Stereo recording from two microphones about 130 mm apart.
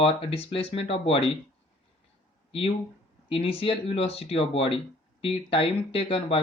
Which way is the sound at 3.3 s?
45° left (ahead or behind).